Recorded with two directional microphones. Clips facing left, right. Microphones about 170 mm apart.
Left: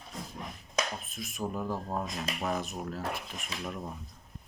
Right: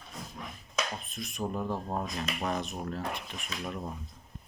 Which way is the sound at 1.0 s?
Centre (ahead or behind).